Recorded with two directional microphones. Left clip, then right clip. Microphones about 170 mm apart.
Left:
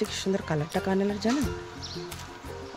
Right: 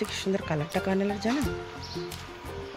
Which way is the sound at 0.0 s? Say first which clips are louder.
Left 1 dB; 20° left (ahead or behind).